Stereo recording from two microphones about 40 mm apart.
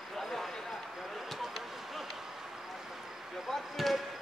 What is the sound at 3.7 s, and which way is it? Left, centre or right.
Basketball bounce, centre.